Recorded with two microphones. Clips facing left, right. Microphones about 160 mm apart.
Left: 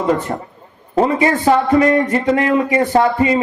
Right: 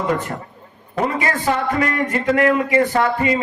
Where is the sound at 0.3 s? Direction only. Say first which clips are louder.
Left 5 dB; 40° left (ahead or behind).